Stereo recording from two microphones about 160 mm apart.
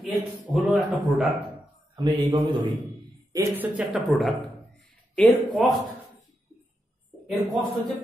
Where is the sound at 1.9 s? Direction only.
30° right (ahead or behind).